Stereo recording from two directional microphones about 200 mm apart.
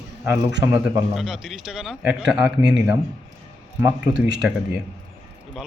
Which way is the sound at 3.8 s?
5° right (ahead or behind).